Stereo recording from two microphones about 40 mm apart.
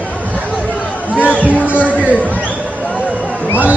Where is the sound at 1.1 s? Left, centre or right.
Right.